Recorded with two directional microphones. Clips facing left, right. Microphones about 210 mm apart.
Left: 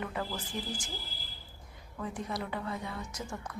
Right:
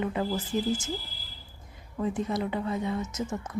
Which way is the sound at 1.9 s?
25° right (ahead or behind).